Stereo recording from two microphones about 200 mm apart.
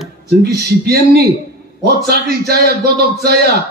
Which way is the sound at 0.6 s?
55° right (ahead or behind).